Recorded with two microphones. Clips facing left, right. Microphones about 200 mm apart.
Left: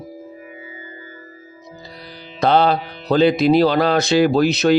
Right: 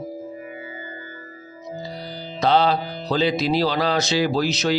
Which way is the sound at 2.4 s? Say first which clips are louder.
Left 3 dB; 55° left (ahead or behind).